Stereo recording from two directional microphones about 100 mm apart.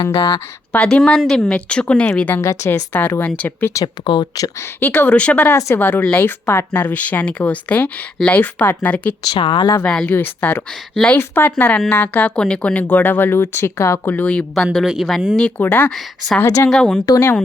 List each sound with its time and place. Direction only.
0.7 s speech: 15° left (ahead or behind)
2.4 s speech: 30° left (ahead or behind)
2.9 s speech: 20° left (ahead or behind)
4.0 s speech: 55° left (ahead or behind)
4.8 s speech: 20° left (ahead or behind)
5.5 s speech: 25° left (ahead or behind)
9.4 s speech: 50° left (ahead or behind)
9.8 s speech: 10° left (ahead or behind)
14.5 s speech: 5° left (ahead or behind)
15.4 s speech: 15° left (ahead or behind)
16.4 s speech: 30° left (ahead or behind)
16.6 s speech: 5° left (ahead or behind)
17.1 s speech: 25° left (ahead or behind)